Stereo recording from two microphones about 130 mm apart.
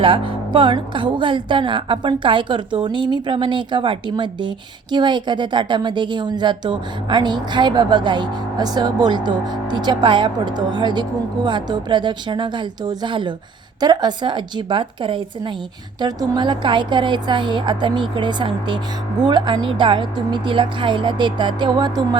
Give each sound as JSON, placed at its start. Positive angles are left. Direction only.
{"t": 0.0, "sound": "speech", "side_deg": -40}